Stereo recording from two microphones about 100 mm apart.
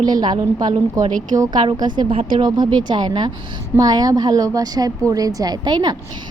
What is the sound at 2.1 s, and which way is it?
Speech, 75° right (ahead or behind).